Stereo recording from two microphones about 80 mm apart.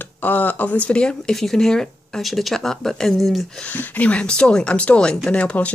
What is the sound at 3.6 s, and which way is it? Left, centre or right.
Speech, centre.